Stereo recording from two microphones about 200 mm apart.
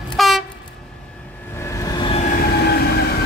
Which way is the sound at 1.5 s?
15° left (ahead or behind).